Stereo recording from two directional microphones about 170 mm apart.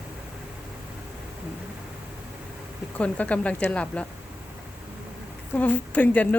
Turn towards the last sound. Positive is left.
turn(degrees=10)  # may be behind; listen again after turning